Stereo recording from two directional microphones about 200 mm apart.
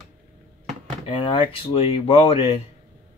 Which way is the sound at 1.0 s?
25° left (ahead or behind).